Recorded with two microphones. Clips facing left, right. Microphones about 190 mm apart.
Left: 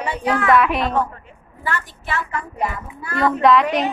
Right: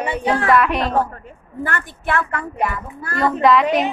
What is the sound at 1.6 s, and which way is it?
A woman's voice, 55° right (ahead or behind).